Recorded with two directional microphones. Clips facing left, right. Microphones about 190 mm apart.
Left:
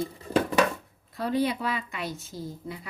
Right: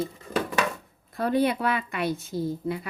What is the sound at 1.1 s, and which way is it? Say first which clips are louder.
Speech: right 3 dB; 55° right (ahead or behind).